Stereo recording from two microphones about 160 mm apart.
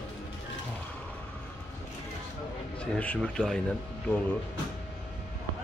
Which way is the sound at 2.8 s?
10° left (ahead or behind).